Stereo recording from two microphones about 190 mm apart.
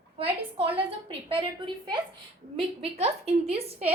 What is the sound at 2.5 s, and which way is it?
A woman's voice, 30° right (ahead or behind).